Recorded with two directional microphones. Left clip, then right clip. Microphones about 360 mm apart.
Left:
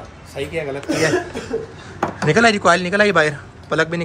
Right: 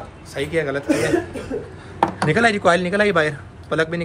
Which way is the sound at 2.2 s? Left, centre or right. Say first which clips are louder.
Left 4 dB; centre.